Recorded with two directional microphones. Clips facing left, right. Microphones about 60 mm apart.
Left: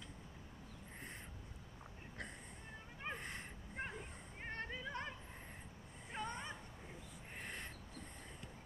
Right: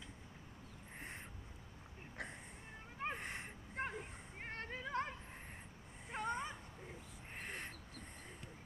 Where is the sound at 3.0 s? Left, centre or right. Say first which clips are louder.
Right 4 dB; right.